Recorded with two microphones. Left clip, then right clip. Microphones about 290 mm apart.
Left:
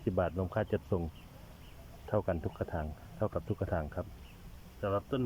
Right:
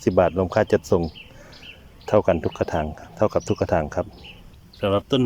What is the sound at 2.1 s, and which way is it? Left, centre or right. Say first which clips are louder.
Speech: right 15 dB; centre.